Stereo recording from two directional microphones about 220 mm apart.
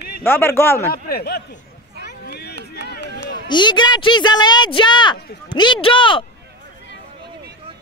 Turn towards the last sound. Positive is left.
turn(degrees=25)  # may be behind; listen again after turning